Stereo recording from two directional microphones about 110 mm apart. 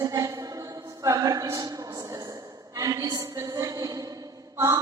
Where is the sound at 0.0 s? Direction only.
35° right (ahead or behind).